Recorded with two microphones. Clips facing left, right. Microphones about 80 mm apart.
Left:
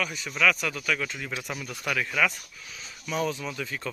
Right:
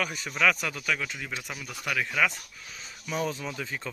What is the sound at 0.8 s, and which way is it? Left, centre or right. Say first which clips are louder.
Speech: left 1 dB; centre.